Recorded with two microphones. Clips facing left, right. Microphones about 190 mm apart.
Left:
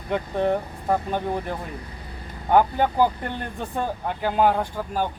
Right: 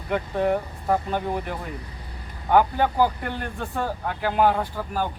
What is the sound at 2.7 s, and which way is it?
Speech, 15° left (ahead or behind).